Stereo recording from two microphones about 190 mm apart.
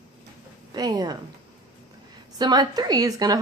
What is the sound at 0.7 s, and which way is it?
Speech, 20° right (ahead or behind).